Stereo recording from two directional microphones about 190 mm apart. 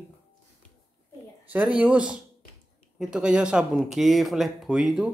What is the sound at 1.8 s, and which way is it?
Speech, 5° right (ahead or behind).